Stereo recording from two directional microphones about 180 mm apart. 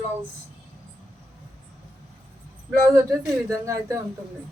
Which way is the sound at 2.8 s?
20° right (ahead or behind).